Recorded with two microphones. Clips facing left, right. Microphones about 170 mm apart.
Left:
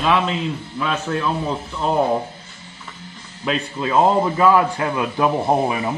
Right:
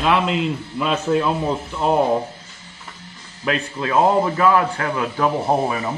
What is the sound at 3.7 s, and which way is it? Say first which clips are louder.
Speech: even; 15° left (ahead or behind).